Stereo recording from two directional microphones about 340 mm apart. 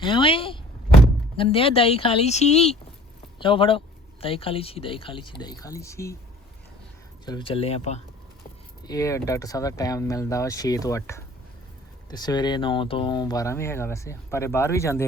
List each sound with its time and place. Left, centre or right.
0.0 s speech: centre
7.3 s speech: centre